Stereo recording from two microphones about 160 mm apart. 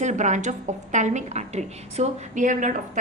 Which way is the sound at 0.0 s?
50° right (ahead or behind).